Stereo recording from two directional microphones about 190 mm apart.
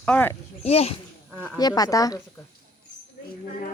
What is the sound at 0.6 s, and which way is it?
Speech, 35° left (ahead or behind).